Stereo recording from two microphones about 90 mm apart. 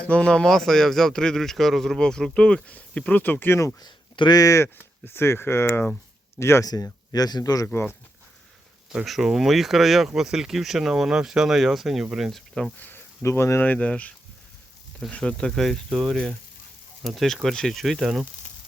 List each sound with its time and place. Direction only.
0.1 s speech: 10° left (ahead or behind); by 3.7 s 25° left (ahead or behind)
3.8 s speech: 50° left (ahead or behind); by 6.7 s 30° left (ahead or behind)
7.1 s speech: 50° left (ahead or behind)
9.0 s speech: centre (ahead or behind)
12.8 s speech: 25° left (ahead or behind)
13.6 s speech: 15° left (ahead or behind)
15.1 s speech: 10° left (ahead or behind)